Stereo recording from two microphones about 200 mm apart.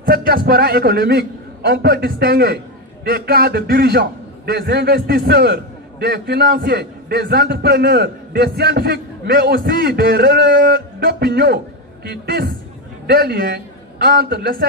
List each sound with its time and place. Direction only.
0.0 s a man's voice: 50° right (ahead or behind)